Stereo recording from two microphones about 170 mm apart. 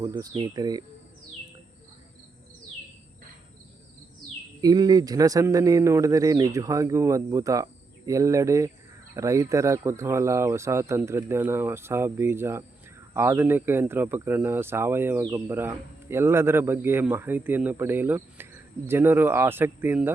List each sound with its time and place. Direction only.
0.0 s speech: 20° right (ahead or behind)
4.6 s speech: 25° right (ahead or behind)